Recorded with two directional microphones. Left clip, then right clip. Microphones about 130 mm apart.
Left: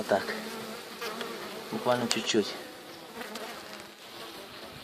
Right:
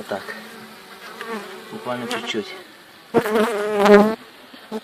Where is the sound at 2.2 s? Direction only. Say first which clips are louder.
Right 2 dB; centre (ahead or behind).